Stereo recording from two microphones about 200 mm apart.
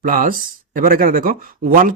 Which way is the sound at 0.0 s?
45° right (ahead or behind).